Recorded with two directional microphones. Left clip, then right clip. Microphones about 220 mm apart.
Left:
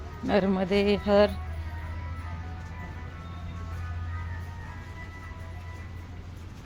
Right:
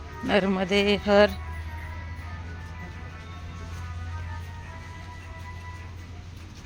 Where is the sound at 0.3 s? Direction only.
Centre (ahead or behind).